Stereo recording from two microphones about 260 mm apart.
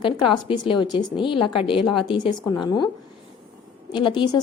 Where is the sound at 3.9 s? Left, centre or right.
Centre.